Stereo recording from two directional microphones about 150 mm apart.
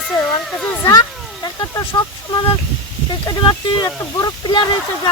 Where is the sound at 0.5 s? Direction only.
5° left (ahead or behind).